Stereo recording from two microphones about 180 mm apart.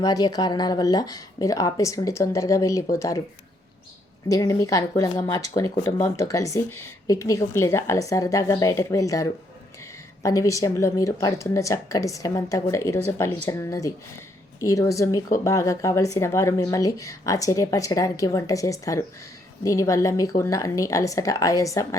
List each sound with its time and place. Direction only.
0.0 s speech: 20° left (ahead or behind)
4.3 s speech: 20° left (ahead or behind)